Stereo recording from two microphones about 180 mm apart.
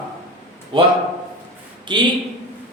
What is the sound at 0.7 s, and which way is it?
Speech, 25° right (ahead or behind).